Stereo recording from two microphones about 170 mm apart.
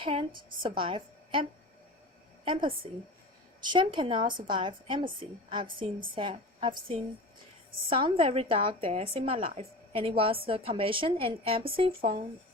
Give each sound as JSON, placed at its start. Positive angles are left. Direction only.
{"t": 0.0, "sound": "a woman's voice", "side_deg": -30}